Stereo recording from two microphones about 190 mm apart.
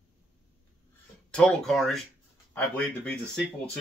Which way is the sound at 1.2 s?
5° left (ahead or behind).